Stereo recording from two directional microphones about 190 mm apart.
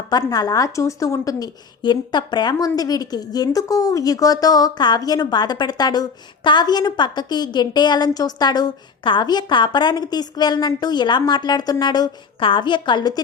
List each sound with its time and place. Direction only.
0.1 s a woman's voice: 20° left (ahead or behind)